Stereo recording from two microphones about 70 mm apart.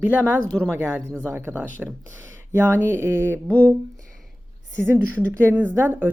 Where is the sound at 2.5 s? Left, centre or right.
Right.